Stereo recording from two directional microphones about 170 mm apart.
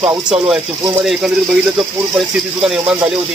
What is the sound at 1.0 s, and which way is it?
Speech, 5° right (ahead or behind).